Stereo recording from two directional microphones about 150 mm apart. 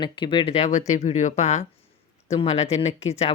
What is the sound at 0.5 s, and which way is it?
Speech, 50° left (ahead or behind).